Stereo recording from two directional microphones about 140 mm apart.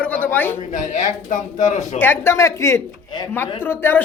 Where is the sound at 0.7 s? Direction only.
65° left (ahead or behind).